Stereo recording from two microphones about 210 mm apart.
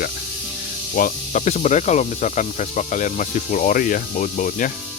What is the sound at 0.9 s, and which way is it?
Speech, 40° left (ahead or behind).